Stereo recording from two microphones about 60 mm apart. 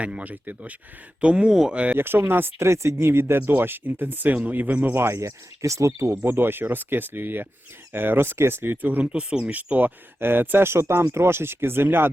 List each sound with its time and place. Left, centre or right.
0.0 s speech: right
2.0 s speech: right
2.6 s speech: right
4.9 s speech: right
6.1 s speech: right
9.1 s speech: centre
9.5 s speech: right